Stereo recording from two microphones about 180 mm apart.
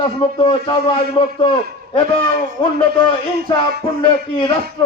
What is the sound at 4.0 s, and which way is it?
Speech, 30° left (ahead or behind).